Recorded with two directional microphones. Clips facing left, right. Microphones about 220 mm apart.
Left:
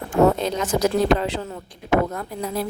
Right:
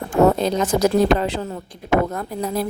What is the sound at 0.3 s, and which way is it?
A woman's voice, 35° right (ahead or behind).